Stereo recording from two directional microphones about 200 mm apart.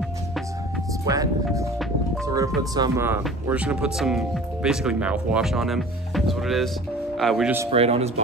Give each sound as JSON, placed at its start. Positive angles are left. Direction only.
{"t": 1.0, "sound": "speech", "side_deg": -15}
{"t": 7.7, "sound": "speech", "side_deg": -30}